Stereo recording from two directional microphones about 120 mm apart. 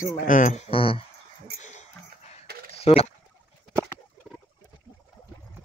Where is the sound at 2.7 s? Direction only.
55° left (ahead or behind).